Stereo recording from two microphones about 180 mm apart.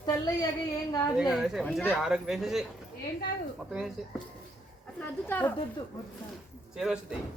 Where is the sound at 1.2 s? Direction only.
Centre (ahead or behind).